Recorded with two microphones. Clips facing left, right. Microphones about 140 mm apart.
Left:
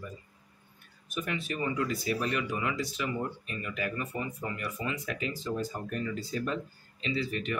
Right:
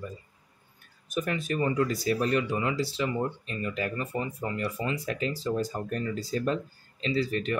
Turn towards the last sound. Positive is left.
turn(degrees=-35)  # may be behind; listen again after turning